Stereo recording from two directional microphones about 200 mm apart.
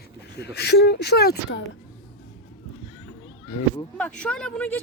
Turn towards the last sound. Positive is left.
turn(degrees=5)  # may be behind; listen again after turning